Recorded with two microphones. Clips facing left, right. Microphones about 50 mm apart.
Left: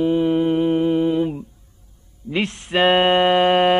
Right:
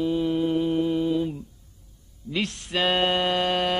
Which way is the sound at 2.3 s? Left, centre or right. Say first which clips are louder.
Left 6 dB; left.